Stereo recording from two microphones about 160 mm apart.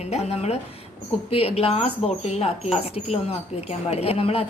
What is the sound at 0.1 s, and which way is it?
Speech, 40° left (ahead or behind).